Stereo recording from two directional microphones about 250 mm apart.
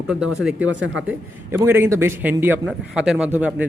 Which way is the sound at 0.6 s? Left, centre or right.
Right.